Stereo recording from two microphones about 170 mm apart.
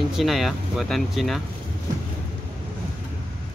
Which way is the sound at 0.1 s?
Centre (ahead or behind).